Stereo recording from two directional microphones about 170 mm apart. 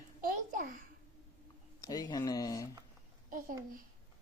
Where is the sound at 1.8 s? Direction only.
20° left (ahead or behind).